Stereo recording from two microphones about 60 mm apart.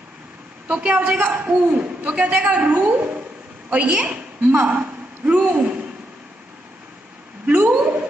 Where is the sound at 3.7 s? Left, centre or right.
Right.